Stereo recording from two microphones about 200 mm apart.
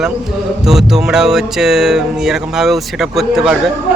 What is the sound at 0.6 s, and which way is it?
Speech, centre (ahead or behind).